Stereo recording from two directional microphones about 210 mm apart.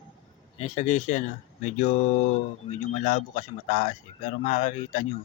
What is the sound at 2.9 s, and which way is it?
Speech, 35° left (ahead or behind).